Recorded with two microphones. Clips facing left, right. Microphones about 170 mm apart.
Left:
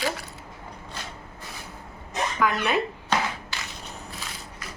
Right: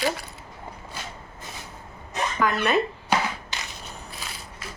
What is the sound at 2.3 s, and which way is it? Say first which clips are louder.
Speech: right 2 dB; 5° left (ahead or behind).